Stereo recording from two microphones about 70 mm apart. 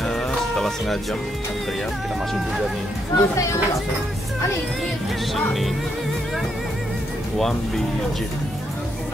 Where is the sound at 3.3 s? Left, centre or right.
Left.